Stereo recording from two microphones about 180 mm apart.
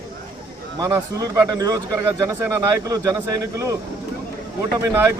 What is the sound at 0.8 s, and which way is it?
Speech, 20° right (ahead or behind).